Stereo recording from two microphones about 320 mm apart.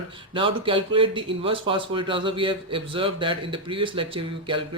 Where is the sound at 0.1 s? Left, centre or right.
Centre.